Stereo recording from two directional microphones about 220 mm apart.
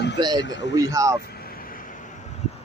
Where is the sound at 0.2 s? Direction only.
20° right (ahead or behind).